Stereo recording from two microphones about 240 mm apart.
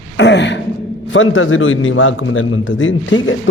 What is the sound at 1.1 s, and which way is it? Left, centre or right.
A man's voice, left.